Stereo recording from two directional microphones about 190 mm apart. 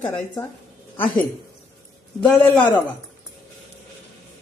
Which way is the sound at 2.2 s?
5° left (ahead or behind).